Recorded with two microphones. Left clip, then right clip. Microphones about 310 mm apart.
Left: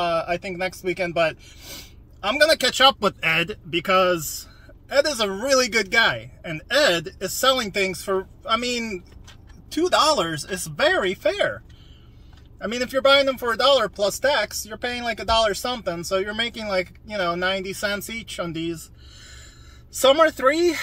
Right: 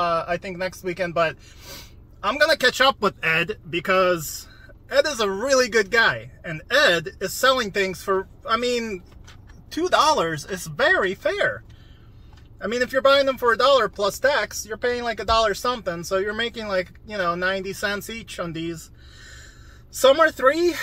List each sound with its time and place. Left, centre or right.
0.0 s speech: centre
12.5 s speech: centre
20.2 s speech: centre